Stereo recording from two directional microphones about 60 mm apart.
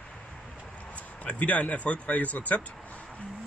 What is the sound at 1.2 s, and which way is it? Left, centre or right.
Speech, left.